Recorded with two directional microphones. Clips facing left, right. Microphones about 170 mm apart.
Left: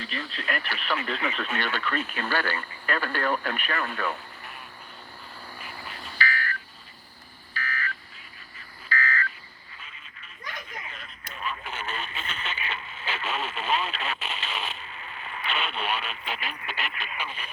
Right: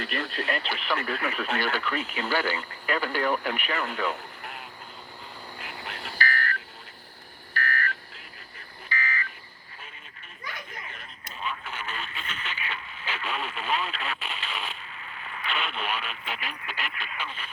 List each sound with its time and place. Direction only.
0.0 s speech: 55° right (ahead or behind)
0.4 s speech: 20° right (ahead or behind)
5.8 s music: 80° right
6.1 s a sound: 45° right (ahead or behind)
8.9 s a sound: 15° right (ahead or behind)
11.6 s radio: 25° left (ahead or behind)